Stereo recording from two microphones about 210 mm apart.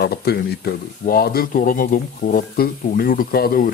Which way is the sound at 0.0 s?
50° left (ahead or behind).